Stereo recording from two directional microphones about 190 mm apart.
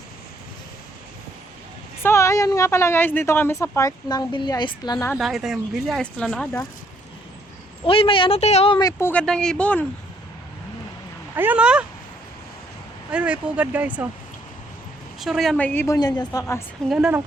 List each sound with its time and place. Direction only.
2.0 s a woman's voice: 15° left (ahead or behind)
5.1 s speech: centre (ahead or behind)
7.9 s speech: 30° left (ahead or behind); by 9.8 s 5° left (ahead or behind)
11.3 s speech: 10° right (ahead or behind)
13.1 s speech: 5° right (ahead or behind)
15.2 s a woman's voice: centre (ahead or behind)
16.9 s speech: 5° right (ahead or behind)